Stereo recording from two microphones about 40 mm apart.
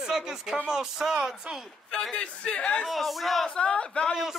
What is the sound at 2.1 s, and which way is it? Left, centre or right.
Speech, left.